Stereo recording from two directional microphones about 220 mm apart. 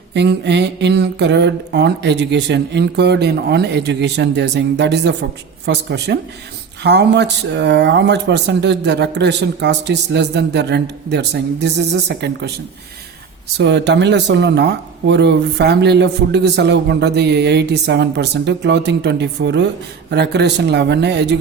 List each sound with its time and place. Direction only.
0.1 s speech: 50° right (ahead or behind)
13.6 s speech: 50° right (ahead or behind)